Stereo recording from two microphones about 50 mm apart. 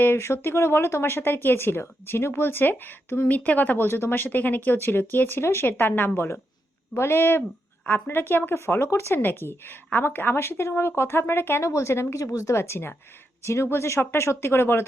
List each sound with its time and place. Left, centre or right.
0.0 s speech: left
3.2 s speech: left
5.6 s speech: left
6.9 s speech: left
7.9 s speech: left
9.2 s speech: left
11.6 s speech: left
13.4 s speech: left